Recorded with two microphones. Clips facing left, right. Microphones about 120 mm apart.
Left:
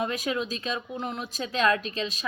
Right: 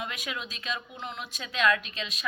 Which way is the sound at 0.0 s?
40° left (ahead or behind).